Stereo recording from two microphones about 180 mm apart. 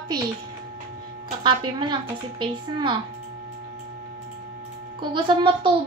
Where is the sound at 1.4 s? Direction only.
25° right (ahead or behind).